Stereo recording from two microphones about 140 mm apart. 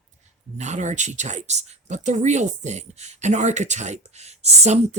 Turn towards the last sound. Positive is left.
turn(degrees=-55)  # may be behind; listen again after turning